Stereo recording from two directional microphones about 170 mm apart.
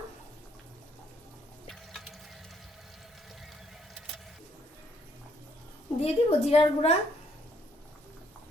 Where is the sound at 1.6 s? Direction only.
Centre (ahead or behind).